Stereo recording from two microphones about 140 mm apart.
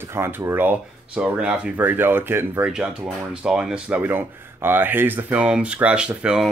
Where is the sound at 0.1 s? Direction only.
15° right (ahead or behind).